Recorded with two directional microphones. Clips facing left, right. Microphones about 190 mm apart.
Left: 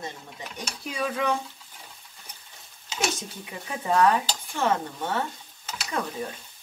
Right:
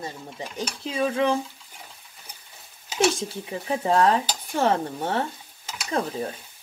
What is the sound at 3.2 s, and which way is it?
Speech, 30° right (ahead or behind).